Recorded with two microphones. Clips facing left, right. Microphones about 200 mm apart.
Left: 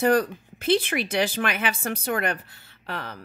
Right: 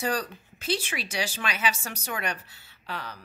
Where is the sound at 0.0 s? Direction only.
55° left (ahead or behind).